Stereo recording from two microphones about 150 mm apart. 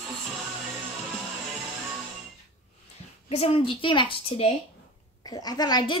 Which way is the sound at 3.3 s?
40° left (ahead or behind).